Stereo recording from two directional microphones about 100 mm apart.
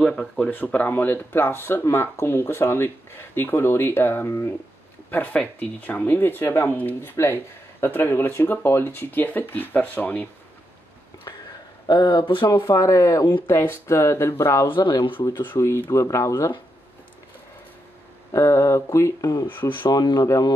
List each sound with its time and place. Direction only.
0.0 s speech: 5° left (ahead or behind)
0.5 s speech: 15° left (ahead or behind)
11.8 s speech: 50° left (ahead or behind); by 14.7 s 25° left (ahead or behind)
14.7 s speech: 45° left (ahead or behind)
15.4 s speech: 25° left (ahead or behind)
18.3 s mantra: 30° left (ahead or behind)
19.4 s speech: 20° left (ahead or behind)
19.8 s speech: 45° left (ahead or behind)